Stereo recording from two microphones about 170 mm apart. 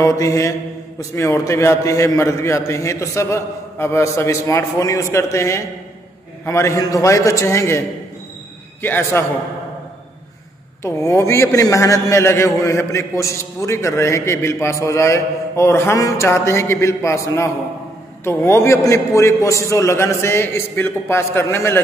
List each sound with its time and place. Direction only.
0.0 s mantra: 20° left (ahead or behind)
1.1 s a man's voice: 15° left (ahead or behind)
8.8 s a man's voice: 10° left (ahead or behind)
10.8 s a man's voice: 15° left (ahead or behind)